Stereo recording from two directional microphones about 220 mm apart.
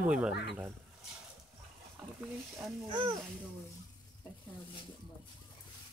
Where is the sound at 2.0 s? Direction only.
5° right (ahead or behind).